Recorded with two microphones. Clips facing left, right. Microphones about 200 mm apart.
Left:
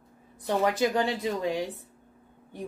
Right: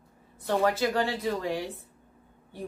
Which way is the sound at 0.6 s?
15° left (ahead or behind).